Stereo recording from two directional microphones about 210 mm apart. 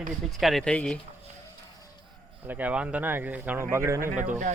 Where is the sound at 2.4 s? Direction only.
10° right (ahead or behind).